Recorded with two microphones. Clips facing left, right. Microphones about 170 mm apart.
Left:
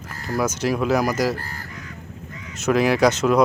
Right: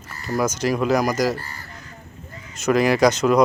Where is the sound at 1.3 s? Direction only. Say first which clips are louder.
Left 1 dB; 90° left.